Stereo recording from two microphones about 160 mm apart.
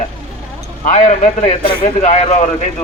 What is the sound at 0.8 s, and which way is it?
A man's voice, 50° left (ahead or behind).